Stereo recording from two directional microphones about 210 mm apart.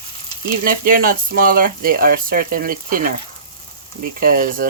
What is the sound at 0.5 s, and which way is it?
Speech, 45° right (ahead or behind).